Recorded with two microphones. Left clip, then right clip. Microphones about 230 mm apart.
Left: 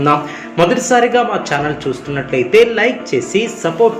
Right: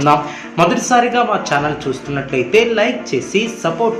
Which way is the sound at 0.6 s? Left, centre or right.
Centre.